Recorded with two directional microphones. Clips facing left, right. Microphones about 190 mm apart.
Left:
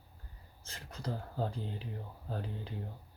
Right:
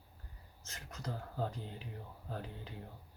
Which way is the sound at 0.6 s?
30° left (ahead or behind).